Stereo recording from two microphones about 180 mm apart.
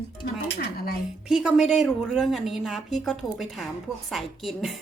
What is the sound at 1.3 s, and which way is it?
Speech, 5° right (ahead or behind).